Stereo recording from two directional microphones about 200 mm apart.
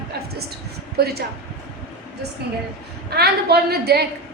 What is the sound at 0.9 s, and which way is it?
Speech, 50° right (ahead or behind).